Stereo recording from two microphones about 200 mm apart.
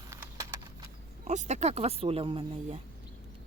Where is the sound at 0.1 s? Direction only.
15° right (ahead or behind).